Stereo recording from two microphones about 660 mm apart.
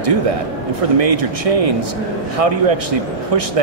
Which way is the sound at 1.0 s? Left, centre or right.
Right.